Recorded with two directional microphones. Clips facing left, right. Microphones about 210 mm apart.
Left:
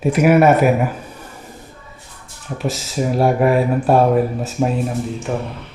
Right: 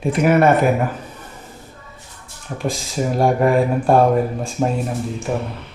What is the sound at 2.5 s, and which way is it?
Speech, 5° left (ahead or behind).